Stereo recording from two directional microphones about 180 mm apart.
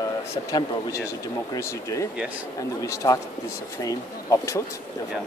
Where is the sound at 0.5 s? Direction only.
20° left (ahead or behind).